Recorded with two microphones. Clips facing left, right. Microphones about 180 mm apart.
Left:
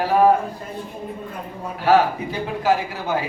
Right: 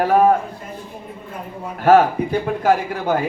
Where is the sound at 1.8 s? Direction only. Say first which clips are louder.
Right 4 dB; 50° right (ahead or behind).